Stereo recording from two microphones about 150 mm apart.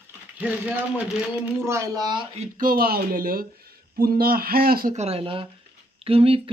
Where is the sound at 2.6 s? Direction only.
75° right (ahead or behind).